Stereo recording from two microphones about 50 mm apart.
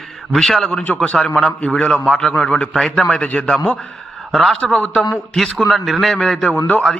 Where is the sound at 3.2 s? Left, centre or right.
Left.